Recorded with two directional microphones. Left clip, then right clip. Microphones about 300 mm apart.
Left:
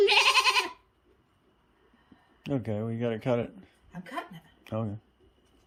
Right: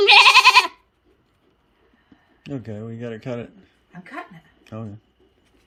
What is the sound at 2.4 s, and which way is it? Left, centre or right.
A man's voice, centre.